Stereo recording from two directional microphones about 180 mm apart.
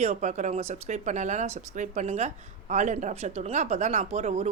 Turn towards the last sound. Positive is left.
turn(degrees=-35)  # may be behind; listen again after turning